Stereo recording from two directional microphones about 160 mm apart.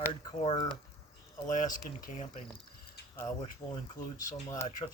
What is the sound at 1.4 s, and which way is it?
Speech, 55° left (ahead or behind).